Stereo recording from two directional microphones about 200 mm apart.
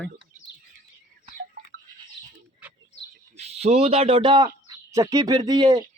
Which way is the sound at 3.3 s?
30° right (ahead or behind).